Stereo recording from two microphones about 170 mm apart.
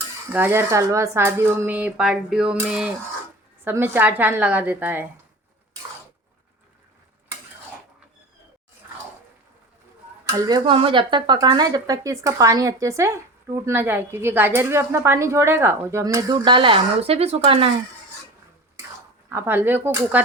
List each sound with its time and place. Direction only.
0.3 s speech: 15° right (ahead or behind)
10.2 s speech: 20° right (ahead or behind)
19.3 s speech: 15° right (ahead or behind)